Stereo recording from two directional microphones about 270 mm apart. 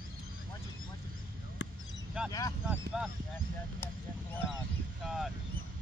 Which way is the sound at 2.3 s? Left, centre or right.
Centre.